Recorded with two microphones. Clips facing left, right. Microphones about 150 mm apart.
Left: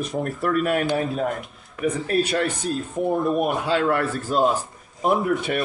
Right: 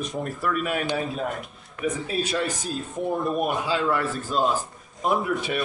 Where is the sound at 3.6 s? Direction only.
65° left (ahead or behind).